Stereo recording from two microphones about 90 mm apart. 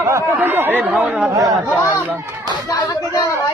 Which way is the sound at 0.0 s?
30° right (ahead or behind).